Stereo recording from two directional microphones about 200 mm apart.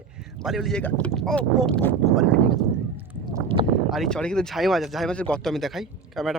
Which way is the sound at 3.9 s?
Centre (ahead or behind).